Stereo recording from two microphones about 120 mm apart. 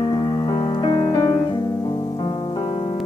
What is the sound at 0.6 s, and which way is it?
Music, 45° left (ahead or behind).